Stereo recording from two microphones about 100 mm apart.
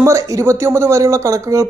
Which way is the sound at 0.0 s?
30° right (ahead or behind).